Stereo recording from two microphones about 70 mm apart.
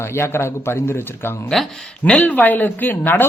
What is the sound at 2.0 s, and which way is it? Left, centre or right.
Speech, centre.